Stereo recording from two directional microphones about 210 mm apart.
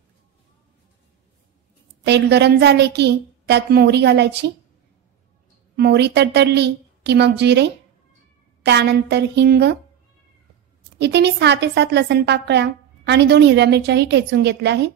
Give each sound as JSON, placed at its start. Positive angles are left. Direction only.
{"t": 2.0, "sound": "a woman's voice", "side_deg": -55}
{"t": 5.8, "sound": "a woman's voice", "side_deg": -50}
{"t": 11.0, "sound": "a woman's voice", "side_deg": -55}